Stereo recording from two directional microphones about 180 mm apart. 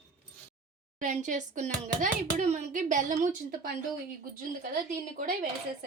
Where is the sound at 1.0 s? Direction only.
45° right (ahead or behind).